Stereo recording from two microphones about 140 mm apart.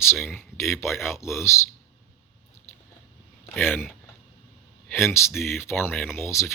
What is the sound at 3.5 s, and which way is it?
Speech, 15° left (ahead or behind).